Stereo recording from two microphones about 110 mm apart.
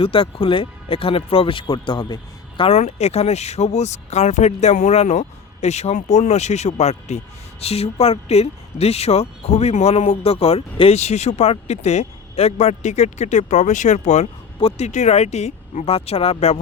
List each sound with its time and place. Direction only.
0.0 s speech: 55° left (ahead or behind)
2.6 s speech: 80° left
7.6 s speech: 70° left (ahead or behind)